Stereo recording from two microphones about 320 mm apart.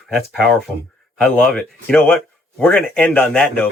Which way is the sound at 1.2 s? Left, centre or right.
Centre.